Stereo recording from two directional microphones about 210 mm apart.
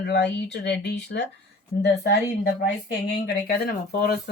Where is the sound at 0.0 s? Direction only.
50° left (ahead or behind).